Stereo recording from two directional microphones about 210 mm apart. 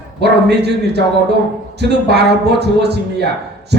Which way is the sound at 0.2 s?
50° right (ahead or behind).